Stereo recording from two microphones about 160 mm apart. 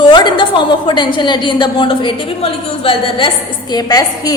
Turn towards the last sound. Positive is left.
turn(degrees=25)  # may be behind; listen again after turning